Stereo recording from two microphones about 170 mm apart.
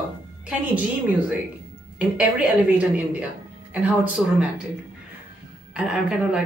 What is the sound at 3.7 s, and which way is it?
Speech, 5° right (ahead or behind).